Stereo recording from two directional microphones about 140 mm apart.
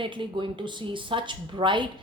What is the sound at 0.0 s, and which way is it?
A woman's voice, 35° right (ahead or behind).